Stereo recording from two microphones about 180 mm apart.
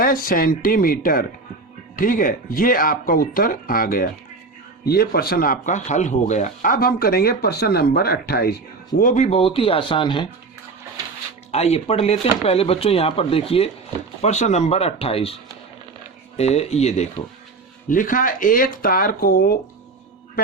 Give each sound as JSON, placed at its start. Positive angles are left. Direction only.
{"t": 0.0, "sound": "speech", "side_deg": 50}
{"t": 9.0, "sound": "speech", "side_deg": 45}
{"t": 11.5, "sound": "speech", "side_deg": 35}
{"t": 16.4, "sound": "speech", "side_deg": 35}
{"t": 17.8, "sound": "speech", "side_deg": 50}